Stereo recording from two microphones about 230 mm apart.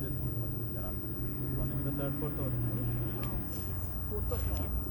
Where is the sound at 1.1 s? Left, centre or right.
Right.